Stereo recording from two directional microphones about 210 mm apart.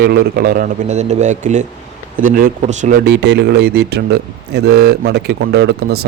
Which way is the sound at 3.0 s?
55° right (ahead or behind).